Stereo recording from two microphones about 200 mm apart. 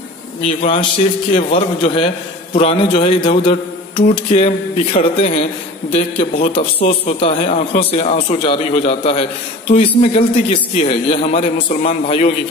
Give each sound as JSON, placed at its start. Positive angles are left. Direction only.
{"t": 0.5, "sound": "a man's voice", "side_deg": 30}